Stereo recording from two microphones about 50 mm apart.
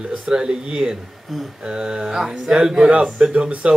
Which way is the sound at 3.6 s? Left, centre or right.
Right.